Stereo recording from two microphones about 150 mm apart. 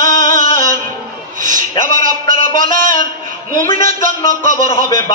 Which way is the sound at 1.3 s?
60° right (ahead or behind).